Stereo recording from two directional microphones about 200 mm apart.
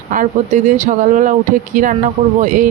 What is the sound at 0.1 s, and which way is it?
Speech, 40° right (ahead or behind).